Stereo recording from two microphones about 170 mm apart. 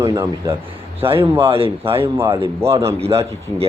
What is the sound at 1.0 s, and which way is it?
Speech, 35° right (ahead or behind).